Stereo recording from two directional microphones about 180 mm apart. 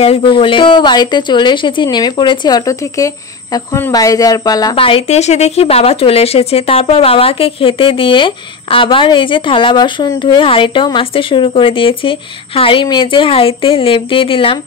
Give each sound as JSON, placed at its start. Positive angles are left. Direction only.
{"t": 0.0, "sound": "a woman's voice", "side_deg": 30}